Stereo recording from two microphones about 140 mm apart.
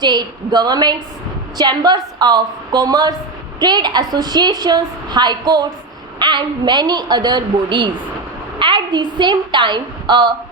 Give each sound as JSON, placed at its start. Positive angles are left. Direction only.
{"t": 0.0, "sound": "a woman's voice", "side_deg": -30}